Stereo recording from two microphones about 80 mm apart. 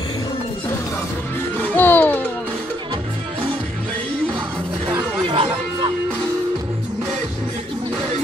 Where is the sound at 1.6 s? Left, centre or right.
Left.